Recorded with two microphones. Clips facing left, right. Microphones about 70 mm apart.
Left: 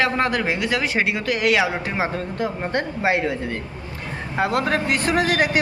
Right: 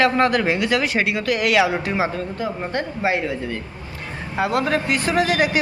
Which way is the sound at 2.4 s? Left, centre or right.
Left.